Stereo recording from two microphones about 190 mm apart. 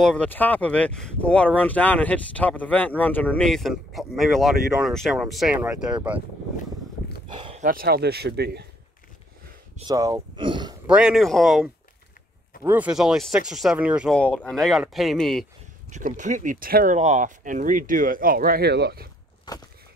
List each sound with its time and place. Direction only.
0.0 s speech: 5° left (ahead or behind)
7.3 s bow-wow: 25° right (ahead or behind)
7.6 s speech: 50° right (ahead or behind)
9.8 s a sound: 20° right (ahead or behind)
10.9 s speech: 5° right (ahead or behind)
14.1 s speech: 5° left (ahead or behind)
15.9 s speech: 40° right (ahead or behind); by 19.0 s 60° right (ahead or behind)